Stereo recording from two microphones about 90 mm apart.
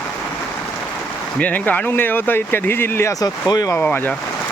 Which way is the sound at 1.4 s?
15° left (ahead or behind).